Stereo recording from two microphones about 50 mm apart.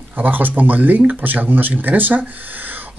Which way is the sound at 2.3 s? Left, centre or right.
Right.